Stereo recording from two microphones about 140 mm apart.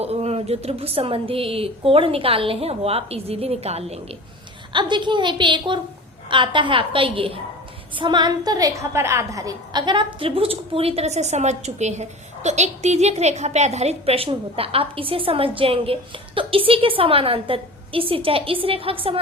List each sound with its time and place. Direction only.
0.0 s a woman's voice: 45° right (ahead or behind)
4.7 s a woman's voice: 35° right (ahead or behind)